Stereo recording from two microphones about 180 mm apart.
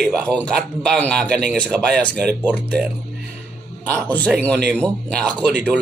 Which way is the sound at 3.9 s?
10° left (ahead or behind).